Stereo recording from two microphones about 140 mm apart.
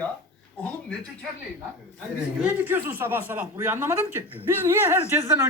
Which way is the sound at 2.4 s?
15° right (ahead or behind).